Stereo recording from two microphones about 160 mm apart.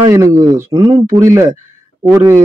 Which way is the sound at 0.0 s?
20° right (ahead or behind).